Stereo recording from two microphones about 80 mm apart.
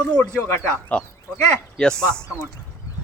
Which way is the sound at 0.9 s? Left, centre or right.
Centre.